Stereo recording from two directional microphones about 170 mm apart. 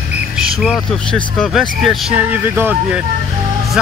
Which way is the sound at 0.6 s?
Centre (ahead or behind).